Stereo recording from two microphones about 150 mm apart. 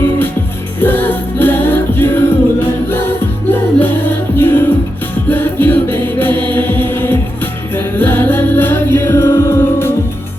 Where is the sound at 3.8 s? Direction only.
15° left (ahead or behind).